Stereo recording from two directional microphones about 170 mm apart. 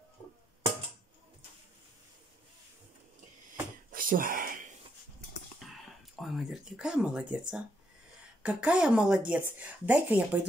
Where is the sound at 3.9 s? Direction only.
55° right (ahead or behind).